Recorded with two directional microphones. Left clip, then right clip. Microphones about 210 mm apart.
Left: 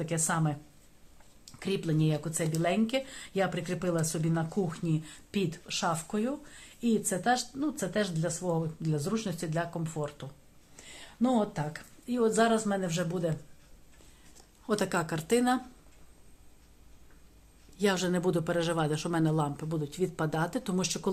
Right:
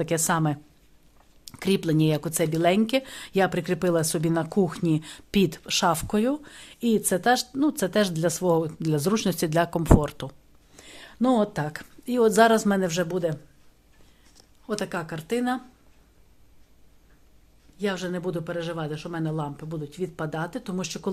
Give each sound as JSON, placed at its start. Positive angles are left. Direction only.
{"t": 0.0, "sound": "speech", "side_deg": -55}
{"t": 14.7, "sound": "a man's voice", "side_deg": 0}
{"t": 17.7, "sound": "a man's voice", "side_deg": 5}